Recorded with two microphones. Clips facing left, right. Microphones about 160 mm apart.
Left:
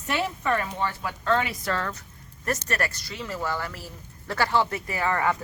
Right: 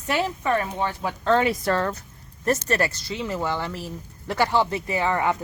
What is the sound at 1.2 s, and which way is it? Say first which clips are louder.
Speech: right 5 dB; 30° right (ahead or behind).